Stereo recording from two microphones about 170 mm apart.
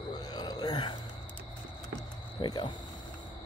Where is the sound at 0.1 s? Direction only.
25° left (ahead or behind).